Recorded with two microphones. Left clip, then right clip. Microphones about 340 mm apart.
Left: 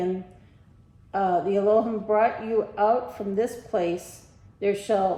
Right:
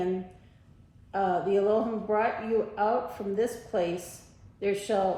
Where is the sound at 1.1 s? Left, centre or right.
Left.